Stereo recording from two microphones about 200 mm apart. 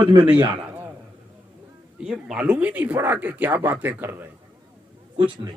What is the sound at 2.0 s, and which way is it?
A man's voice, 5° right (ahead or behind).